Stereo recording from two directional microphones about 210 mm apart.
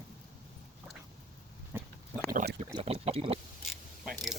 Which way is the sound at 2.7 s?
25° right (ahead or behind).